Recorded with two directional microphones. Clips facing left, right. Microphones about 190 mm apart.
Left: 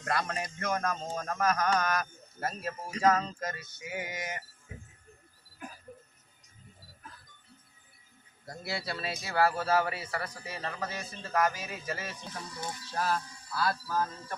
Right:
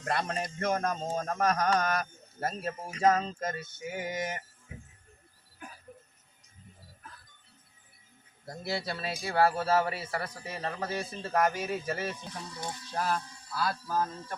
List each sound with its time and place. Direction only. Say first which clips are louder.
0.0 s speech: right 1 dB; 30° right (ahead or behind)
8.4 s speech: right 2 dB; 25° right (ahead or behind)
12.5 s a sound: even; 15° right (ahead or behind)
13.6 s speech: even; 20° right (ahead or behind)